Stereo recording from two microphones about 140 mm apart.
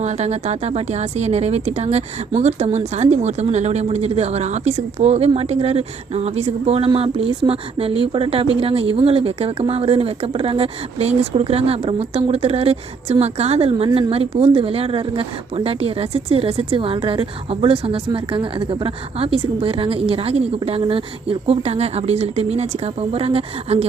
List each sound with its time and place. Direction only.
0.0 s speech: 50° right (ahead or behind)